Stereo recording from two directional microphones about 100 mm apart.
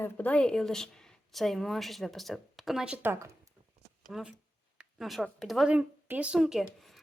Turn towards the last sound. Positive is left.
turn(degrees=0)  # may be behind; listen again after turning